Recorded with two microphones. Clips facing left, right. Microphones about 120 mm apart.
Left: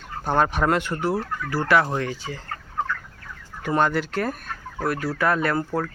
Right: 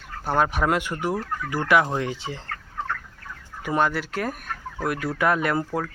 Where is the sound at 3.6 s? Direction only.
5° right (ahead or behind).